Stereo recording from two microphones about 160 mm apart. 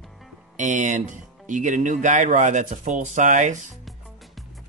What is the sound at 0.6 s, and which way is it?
Speech, 50° right (ahead or behind).